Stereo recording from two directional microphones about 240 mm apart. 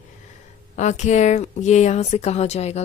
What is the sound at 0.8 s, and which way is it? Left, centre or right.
Speech, left.